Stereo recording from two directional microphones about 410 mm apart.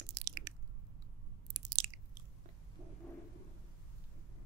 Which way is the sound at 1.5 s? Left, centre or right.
Right.